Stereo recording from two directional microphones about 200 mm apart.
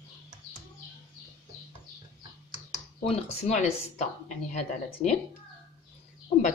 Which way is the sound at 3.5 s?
35° left (ahead or behind).